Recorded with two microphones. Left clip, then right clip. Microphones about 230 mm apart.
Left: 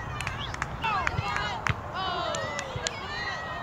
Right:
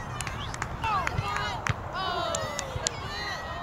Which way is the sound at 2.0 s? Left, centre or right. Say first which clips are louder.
Right 2 dB; right.